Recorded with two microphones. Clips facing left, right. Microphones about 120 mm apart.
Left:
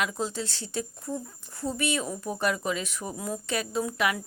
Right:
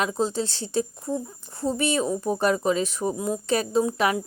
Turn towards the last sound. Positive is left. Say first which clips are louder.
# right 6 dB
turn(degrees=-30)  # may be behind; listen again after turning